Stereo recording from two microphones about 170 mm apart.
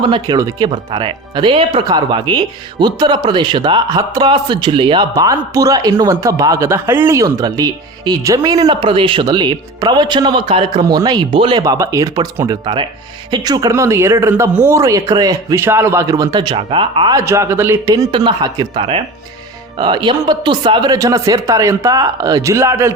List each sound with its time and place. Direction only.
0.0 s speech: 25° right (ahead or behind)